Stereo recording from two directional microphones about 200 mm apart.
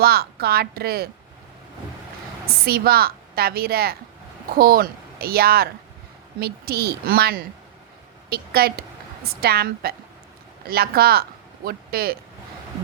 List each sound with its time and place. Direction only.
0.0 s a woman's voice: 50° right (ahead or behind)
2.6 s a woman's voice: 50° right (ahead or behind)